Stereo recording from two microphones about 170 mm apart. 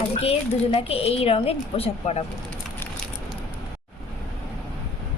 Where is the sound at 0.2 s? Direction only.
35° left (ahead or behind).